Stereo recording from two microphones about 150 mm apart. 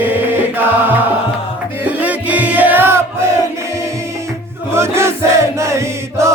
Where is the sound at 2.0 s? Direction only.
10° right (ahead or behind).